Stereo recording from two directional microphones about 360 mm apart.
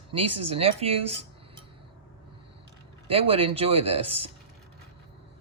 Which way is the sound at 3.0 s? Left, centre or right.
Centre.